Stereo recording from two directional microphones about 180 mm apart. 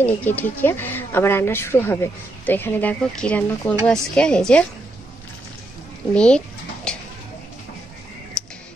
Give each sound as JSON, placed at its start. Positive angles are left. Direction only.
{"t": 0.0, "sound": "a woman's voice", "side_deg": 10}
{"t": 6.1, "sound": "bird", "side_deg": 5}
{"t": 8.4, "sound": "music", "side_deg": 5}